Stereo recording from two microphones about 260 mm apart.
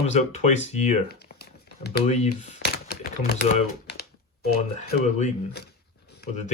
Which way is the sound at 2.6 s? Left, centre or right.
Left.